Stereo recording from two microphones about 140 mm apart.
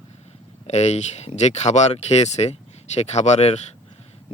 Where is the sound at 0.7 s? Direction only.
50° left (ahead or behind).